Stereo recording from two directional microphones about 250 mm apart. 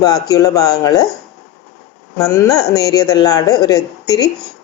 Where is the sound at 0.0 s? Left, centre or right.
Centre.